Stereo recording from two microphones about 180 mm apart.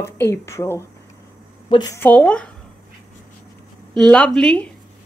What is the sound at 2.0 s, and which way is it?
Speech, 10° left (ahead or behind).